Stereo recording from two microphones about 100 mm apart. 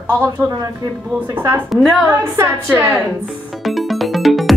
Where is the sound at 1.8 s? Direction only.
Centre (ahead or behind).